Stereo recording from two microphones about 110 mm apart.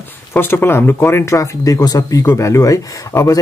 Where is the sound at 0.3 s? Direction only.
20° left (ahead or behind).